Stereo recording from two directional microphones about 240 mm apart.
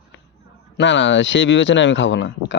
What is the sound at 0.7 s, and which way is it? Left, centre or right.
A man's voice, left.